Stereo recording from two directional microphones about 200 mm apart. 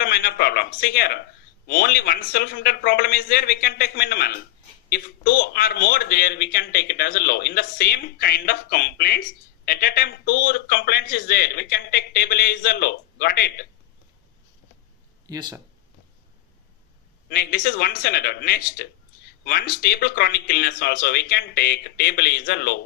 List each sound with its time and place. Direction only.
0.0 s a man's voice: 50° left (ahead or behind)
15.3 s speech: 20° right (ahead or behind)
17.2 s a man's voice: 50° left (ahead or behind)